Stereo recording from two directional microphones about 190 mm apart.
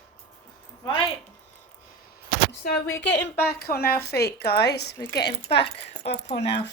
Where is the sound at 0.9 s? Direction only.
25° left (ahead or behind).